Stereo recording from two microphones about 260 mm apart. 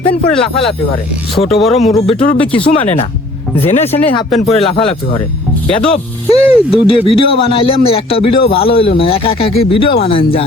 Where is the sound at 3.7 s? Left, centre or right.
Left.